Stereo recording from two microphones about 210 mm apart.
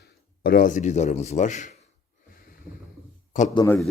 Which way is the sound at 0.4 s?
40° left (ahead or behind).